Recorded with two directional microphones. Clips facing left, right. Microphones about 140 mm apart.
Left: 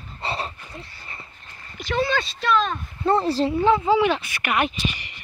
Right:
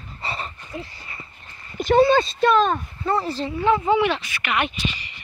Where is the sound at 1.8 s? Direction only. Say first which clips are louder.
Right 8 dB; 50° right (ahead or behind).